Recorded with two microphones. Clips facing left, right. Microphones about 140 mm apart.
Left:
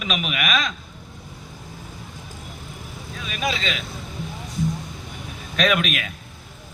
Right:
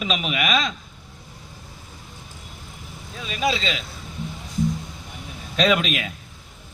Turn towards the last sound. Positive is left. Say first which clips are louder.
# right 1 dB
turn(degrees=-25)  # may be behind; listen again after turning